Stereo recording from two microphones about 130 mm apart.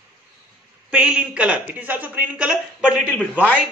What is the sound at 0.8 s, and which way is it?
Speech, 10° right (ahead or behind).